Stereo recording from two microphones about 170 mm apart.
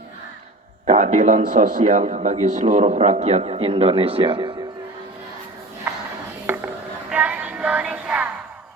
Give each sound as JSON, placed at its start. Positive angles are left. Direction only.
{"t": 0.9, "sound": "a man's voice", "side_deg": -50}
{"t": 6.5, "sound": "a sound", "side_deg": -10}
{"t": 7.1, "sound": "music", "side_deg": -5}